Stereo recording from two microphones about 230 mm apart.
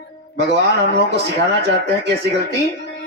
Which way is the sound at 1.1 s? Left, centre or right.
Right.